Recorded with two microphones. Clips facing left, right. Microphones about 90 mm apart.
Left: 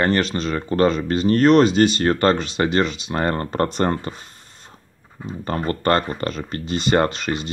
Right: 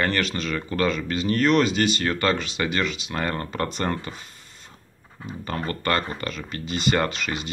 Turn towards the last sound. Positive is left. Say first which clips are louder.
# left 5 dB
turn(degrees=35)  # may be behind; listen again after turning